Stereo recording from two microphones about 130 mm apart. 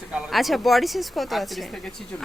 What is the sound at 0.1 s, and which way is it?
Speech, centre (ahead or behind).